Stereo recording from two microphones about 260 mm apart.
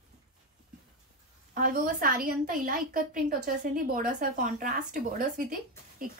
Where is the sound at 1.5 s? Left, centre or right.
Right.